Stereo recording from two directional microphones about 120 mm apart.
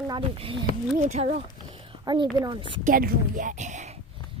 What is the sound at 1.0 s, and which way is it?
Speech, 70° right (ahead or behind).